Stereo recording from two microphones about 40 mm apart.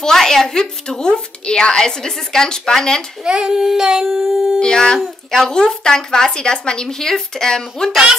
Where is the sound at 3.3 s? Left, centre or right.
Centre.